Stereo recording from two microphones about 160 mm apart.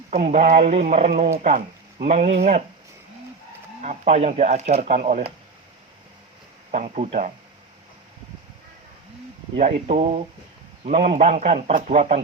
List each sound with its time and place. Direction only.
0.1 s speech: 45° right (ahead or behind)
3.8 s speech: 45° right (ahead or behind)
6.7 s speech: 50° right (ahead or behind)
9.6 s speech: 45° right (ahead or behind)